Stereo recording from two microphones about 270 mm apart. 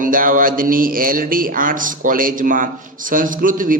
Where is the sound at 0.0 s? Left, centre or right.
Right.